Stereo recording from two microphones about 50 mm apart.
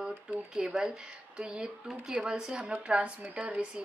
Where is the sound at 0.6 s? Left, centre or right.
Centre.